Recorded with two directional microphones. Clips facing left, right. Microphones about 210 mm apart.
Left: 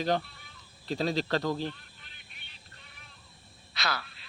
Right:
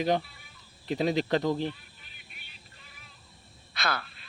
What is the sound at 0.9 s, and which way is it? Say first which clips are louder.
Speech: right 3 dB; 20° right (ahead or behind).